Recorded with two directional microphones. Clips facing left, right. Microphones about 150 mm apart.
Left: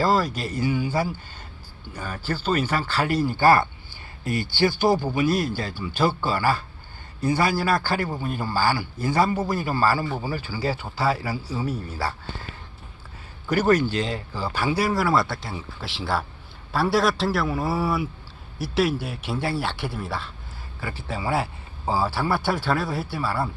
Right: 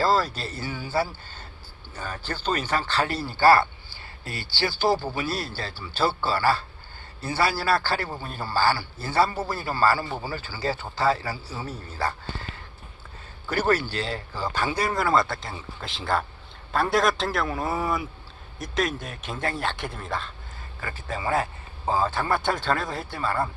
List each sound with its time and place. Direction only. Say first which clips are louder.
0.0 s speech: left 1 dB; 15° left (ahead or behind)
13.5 s speech: left 4 dB; 15° left (ahead or behind)
13.9 s speech: left 4 dB; 35° right (ahead or behind)
14.3 s speech: left 2 dB; 10° left (ahead or behind)